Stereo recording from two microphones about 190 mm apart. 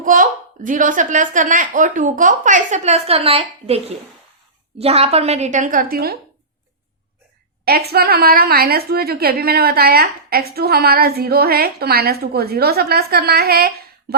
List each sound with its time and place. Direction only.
0.0 s a woman's voice: 45° right (ahead or behind)
7.6 s a woman's voice: 55° right (ahead or behind)